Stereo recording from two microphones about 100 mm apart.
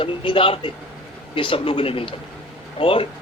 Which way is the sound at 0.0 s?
60° left (ahead or behind).